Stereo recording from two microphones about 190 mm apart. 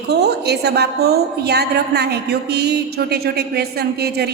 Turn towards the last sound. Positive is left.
turn(degrees=-60)  # may be behind; listen again after turning